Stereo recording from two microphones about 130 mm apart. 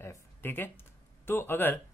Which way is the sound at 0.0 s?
20° left (ahead or behind).